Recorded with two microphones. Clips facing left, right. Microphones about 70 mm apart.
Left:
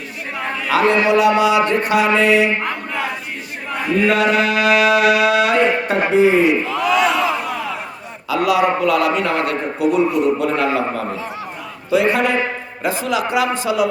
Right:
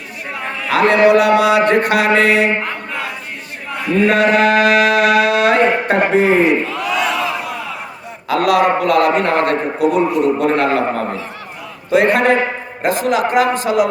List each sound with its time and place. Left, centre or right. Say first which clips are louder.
0.7 s mantra: right 4 dB; right
3.9 s speech: right 3 dB; right
6.7 s crowd: left 2 dB; centre
8.3 s a man's voice: right 3 dB; right